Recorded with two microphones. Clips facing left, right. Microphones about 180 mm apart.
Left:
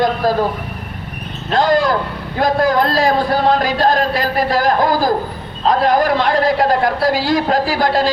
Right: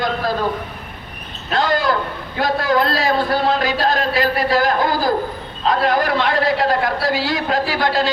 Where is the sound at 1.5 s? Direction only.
45° left (ahead or behind).